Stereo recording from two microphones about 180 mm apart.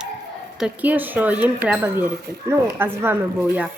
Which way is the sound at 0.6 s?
5° right (ahead or behind).